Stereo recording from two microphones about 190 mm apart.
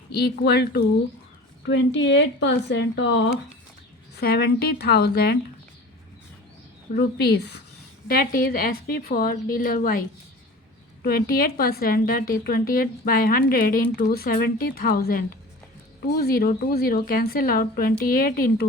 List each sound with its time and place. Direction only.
0.1 s speech: 60° left (ahead or behind)
1.6 s speech: 70° left (ahead or behind)
4.2 s speech: 55° left (ahead or behind)
6.9 s a woman's voice: 55° left (ahead or behind)
11.0 s a woman's voice: 50° left (ahead or behind)